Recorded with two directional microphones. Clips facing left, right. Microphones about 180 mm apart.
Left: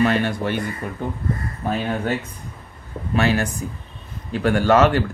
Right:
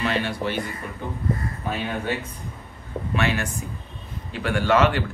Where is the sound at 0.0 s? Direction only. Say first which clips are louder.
Left 5 dB; 45° left (ahead or behind).